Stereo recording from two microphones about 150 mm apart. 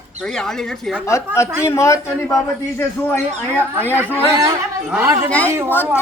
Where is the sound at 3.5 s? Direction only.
15° right (ahead or behind).